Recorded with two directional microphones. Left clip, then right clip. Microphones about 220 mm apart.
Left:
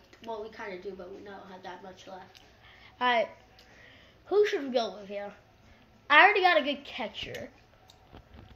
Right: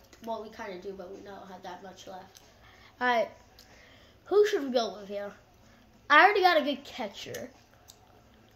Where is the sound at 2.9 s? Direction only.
10° right (ahead or behind).